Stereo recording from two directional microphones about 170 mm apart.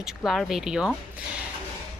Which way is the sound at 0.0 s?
Centre (ahead or behind).